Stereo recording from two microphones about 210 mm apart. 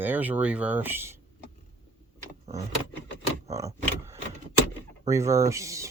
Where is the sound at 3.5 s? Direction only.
15° right (ahead or behind).